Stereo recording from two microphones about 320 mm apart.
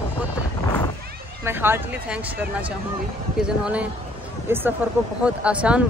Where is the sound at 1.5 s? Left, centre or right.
Centre.